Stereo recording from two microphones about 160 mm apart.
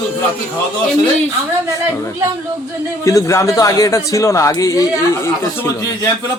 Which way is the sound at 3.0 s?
20° left (ahead or behind).